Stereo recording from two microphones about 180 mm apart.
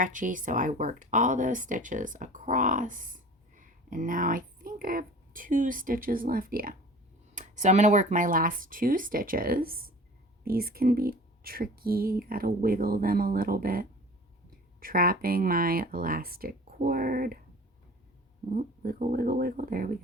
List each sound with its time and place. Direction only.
0.0 s speech: 45° right (ahead or behind)
18.5 s speech: 50° right (ahead or behind)